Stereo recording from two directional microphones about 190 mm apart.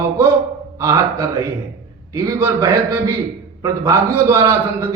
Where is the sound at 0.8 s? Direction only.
15° right (ahead or behind).